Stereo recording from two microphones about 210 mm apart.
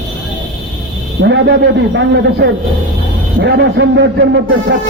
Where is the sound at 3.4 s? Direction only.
55° right (ahead or behind).